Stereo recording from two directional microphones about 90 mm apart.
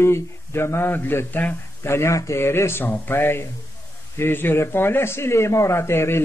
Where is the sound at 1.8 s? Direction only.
30° left (ahead or behind).